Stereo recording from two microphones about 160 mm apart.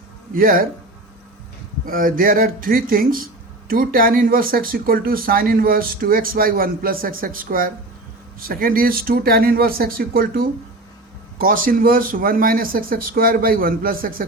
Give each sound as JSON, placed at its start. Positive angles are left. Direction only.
{"t": 0.3, "sound": "speech", "side_deg": -60}
{"t": 1.9, "sound": "speech", "side_deg": -60}